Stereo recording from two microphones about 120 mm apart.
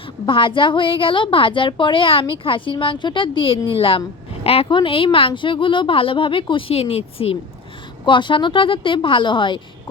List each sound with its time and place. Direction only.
0.3 s a woman's voice: 45° left (ahead or behind)